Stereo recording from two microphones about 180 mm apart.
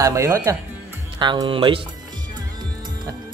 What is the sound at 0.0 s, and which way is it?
Speech, 15° right (ahead or behind).